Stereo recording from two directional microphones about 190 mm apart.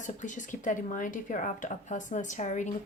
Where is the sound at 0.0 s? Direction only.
40° left (ahead or behind).